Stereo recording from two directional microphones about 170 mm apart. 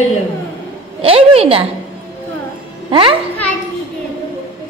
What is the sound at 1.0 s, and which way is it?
Speech, 35° right (ahead or behind).